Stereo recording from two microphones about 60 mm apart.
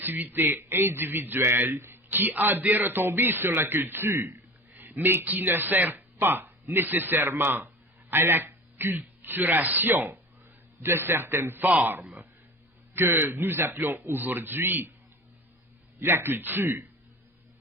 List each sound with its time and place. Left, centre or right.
0.0 s speech: right
12.9 s speech: right
16.0 s speech: right